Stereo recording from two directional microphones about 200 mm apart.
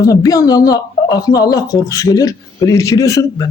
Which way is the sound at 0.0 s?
15° left (ahead or behind).